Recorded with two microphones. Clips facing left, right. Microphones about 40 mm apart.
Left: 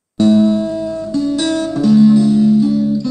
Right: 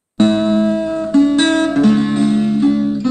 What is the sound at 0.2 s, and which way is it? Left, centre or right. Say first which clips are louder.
Music: left 1 dB; right.